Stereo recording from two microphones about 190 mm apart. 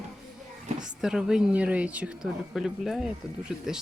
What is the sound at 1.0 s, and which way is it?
Speech, 5° right (ahead or behind).